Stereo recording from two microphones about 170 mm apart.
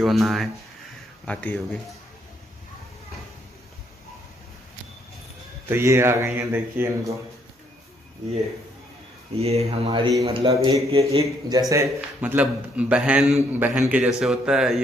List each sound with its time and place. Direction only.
0.0 s a man's voice: centre (ahead or behind)
5.7 s a man's voice: 15° right (ahead or behind)
9.4 s a man's voice: 35° right (ahead or behind); by 14.8 s 5° right (ahead or behind)